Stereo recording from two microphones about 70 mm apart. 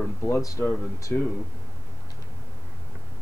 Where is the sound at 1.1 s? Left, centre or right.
Left.